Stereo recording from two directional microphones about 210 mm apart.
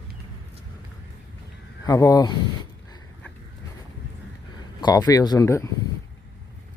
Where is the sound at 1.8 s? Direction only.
15° left (ahead or behind).